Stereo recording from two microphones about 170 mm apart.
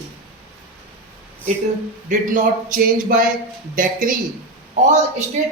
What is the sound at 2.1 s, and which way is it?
Speech, 50° right (ahead or behind).